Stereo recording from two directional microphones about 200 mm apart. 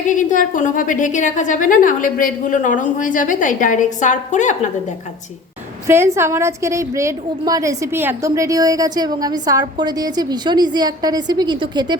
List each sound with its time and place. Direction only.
0.0 s a woman's voice: 40° left (ahead or behind)
5.9 s a woman's voice: 10° right (ahead or behind)